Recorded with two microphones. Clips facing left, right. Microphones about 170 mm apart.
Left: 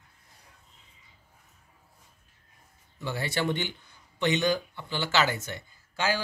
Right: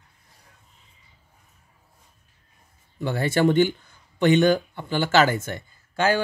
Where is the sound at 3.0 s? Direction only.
55° right (ahead or behind).